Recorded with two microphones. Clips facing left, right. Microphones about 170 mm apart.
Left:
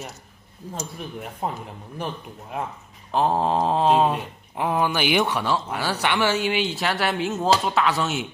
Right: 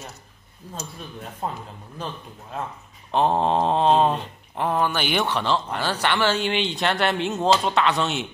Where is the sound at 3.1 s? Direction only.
5° left (ahead or behind).